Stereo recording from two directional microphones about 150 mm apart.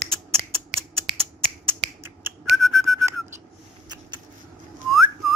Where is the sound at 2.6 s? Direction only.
Centre (ahead or behind).